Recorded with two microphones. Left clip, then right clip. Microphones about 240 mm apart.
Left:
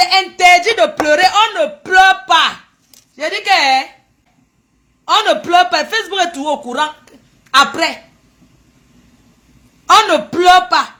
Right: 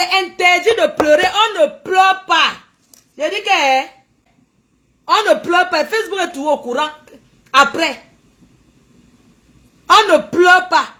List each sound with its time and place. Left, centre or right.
0.1 s a sound: left
3.2 s a man's voice: left
5.0 s a man's voice: left
9.8 s a woman's voice: left